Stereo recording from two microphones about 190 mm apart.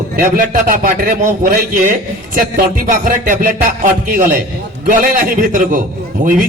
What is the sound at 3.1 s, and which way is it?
Speech, 45° right (ahead or behind).